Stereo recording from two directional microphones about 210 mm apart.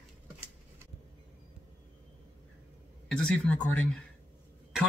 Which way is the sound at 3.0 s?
5° left (ahead or behind).